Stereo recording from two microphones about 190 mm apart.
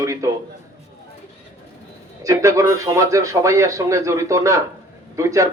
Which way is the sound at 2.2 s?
15° right (ahead or behind).